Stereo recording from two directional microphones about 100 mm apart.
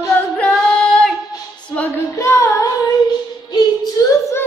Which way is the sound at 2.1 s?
30° left (ahead or behind).